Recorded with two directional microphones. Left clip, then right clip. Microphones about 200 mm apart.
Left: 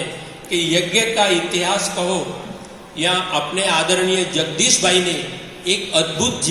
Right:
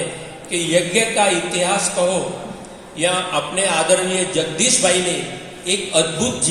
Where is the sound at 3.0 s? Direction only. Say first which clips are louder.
Even; 20° right (ahead or behind).